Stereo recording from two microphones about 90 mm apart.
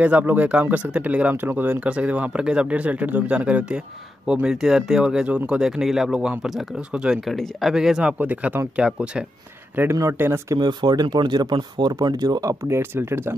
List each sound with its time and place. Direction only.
0.0 s speech: 15° right (ahead or behind)
8.2 s speech: 20° right (ahead or behind)
9.8 s speech: 25° right (ahead or behind)
10.5 s speech: 55° right (ahead or behind); by 13.3 s 25° right (ahead or behind)